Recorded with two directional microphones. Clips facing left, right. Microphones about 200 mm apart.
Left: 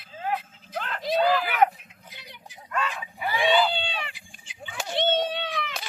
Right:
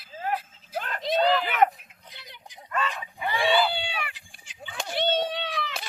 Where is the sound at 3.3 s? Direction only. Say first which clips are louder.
Left 1 dB; 20° left (ahead or behind).